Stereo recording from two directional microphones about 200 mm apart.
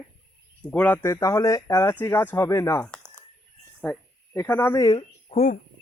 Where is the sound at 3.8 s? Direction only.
10° left (ahead or behind).